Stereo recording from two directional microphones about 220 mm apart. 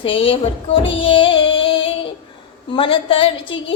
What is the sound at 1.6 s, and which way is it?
Child singing, 25° left (ahead or behind).